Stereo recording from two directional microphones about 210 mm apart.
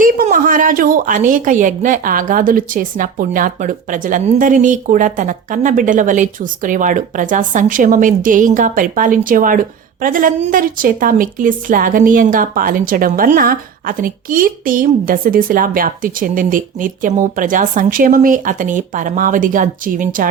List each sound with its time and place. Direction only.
0.0 s a woman's voice: 40° right (ahead or behind)